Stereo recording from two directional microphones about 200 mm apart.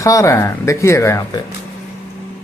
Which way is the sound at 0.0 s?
15° left (ahead or behind).